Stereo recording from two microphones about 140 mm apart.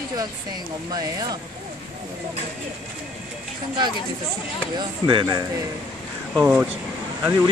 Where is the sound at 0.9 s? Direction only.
25° right (ahead or behind).